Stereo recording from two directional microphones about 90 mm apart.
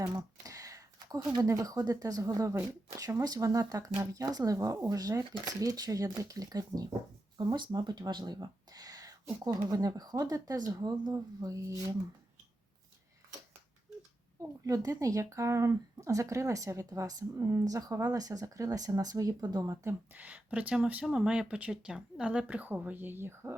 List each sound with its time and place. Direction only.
0.4 s a sound: 40° right (ahead or behind)
1.5 s speech: 40° right (ahead or behind)
7.3 s speech: 55° right (ahead or behind); by 11.9 s 35° right (ahead or behind)
14.6 s speech: 40° right (ahead or behind)
19.9 s speech: 20° right (ahead or behind)